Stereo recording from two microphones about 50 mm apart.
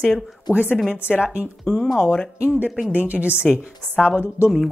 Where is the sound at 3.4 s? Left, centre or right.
Left.